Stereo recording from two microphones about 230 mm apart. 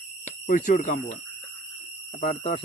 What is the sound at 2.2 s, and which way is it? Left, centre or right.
Speech, left.